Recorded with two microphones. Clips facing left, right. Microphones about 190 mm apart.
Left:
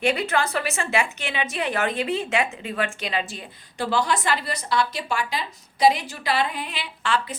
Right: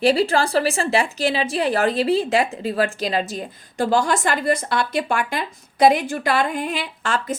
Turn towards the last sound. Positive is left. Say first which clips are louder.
# right 2 dB
turn(degrees=-45)  # may be behind; listen again after turning